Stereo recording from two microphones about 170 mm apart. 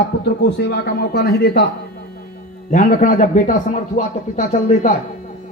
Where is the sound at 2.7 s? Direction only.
50° left (ahead or behind).